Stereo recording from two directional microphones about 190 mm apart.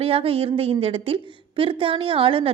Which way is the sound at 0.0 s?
30° right (ahead or behind).